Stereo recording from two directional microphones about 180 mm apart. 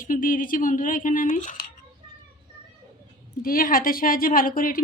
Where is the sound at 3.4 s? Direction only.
55° left (ahead or behind).